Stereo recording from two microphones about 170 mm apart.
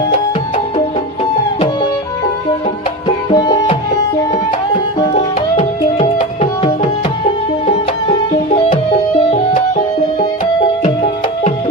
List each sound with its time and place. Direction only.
3.2 s music: 25° left (ahead or behind)
5.1 s tabla: 40° left (ahead or behind)
9.3 s music: 50° left (ahead or behind)